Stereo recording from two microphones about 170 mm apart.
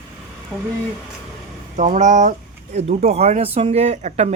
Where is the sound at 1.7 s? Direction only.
45° right (ahead or behind).